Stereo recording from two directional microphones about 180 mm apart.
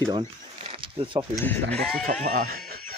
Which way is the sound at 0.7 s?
30° right (ahead or behind).